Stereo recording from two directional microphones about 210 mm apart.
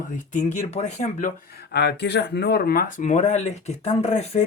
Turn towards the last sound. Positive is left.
turn(degrees=30)  # may be behind; listen again after turning